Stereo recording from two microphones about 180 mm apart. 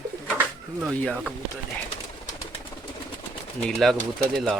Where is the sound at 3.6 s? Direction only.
Centre (ahead or behind).